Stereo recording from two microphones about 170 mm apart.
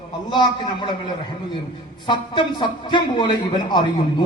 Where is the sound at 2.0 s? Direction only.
30° left (ahead or behind).